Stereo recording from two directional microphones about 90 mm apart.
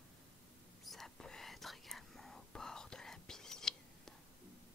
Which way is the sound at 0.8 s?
Centre (ahead or behind).